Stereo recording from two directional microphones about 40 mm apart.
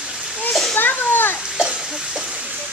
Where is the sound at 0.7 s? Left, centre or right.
Left.